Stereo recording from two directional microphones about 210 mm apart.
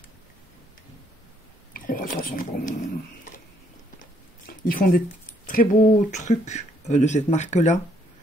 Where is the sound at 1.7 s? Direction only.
40° left (ahead or behind).